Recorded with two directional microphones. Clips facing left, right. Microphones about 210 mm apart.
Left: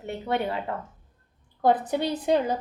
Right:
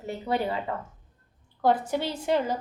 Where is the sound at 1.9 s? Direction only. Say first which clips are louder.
Left 3 dB; 15° left (ahead or behind).